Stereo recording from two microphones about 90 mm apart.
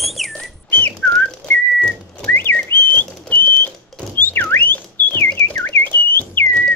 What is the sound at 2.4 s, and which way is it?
Whistling, 25° left (ahead or behind).